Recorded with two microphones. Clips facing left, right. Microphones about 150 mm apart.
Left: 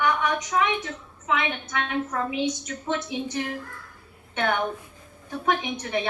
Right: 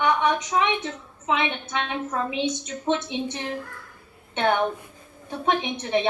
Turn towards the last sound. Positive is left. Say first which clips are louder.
# right 4 dB
turn(degrees=-25)  # may be behind; listen again after turning